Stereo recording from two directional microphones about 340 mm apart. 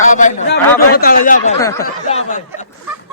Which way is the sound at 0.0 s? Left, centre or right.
Left.